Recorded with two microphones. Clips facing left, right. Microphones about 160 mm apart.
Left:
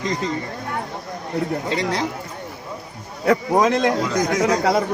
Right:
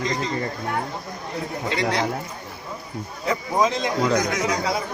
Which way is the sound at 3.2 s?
65° left (ahead or behind).